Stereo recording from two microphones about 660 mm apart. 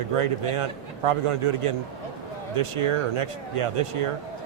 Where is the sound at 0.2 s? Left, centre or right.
Right.